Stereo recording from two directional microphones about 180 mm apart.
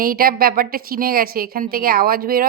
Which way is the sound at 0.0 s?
55° right (ahead or behind).